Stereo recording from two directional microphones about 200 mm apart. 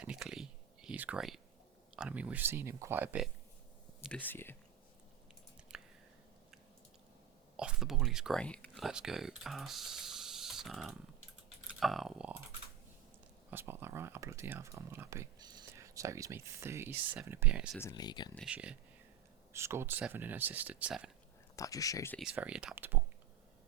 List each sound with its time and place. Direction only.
0.0 s a sound: 5° right (ahead or behind)
2.0 s speech: 5° right (ahead or behind)
4.0 s speech: 5° left (ahead or behind)
5.7 s chewing: centre (ahead or behind)
7.5 s speech: 5° right (ahead or behind)
13.5 s speech: 10° right (ahead or behind)
17.7 s speech: 15° left (ahead or behind)
18.3 s speech: 5° right (ahead or behind)
21.5 s speech: 15° left (ahead or behind)
22.2 s speech: 5° right (ahead or behind)